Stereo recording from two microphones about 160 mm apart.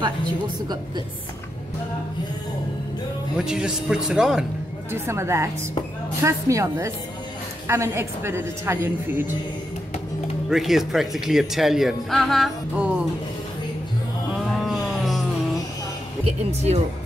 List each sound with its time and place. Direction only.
3.3 s speech: 5° right (ahead or behind)
4.9 s a woman's voice: 15° right (ahead or behind)
10.5 s speech: centre (ahead or behind)
14.6 s a sound: centre (ahead or behind)
16.3 s speech: 40° right (ahead or behind)